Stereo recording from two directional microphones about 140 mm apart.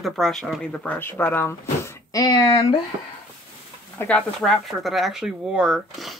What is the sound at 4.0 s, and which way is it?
Speech, 15° left (ahead or behind).